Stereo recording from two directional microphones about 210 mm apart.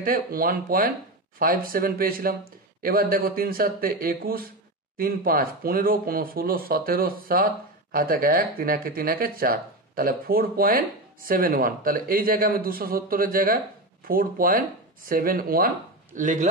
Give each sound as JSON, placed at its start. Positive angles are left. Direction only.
{"t": 0.0, "sound": "a man's voice", "side_deg": -45}